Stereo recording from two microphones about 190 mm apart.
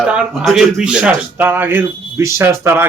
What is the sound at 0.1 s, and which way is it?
A man's voice, 5° right (ahead or behind).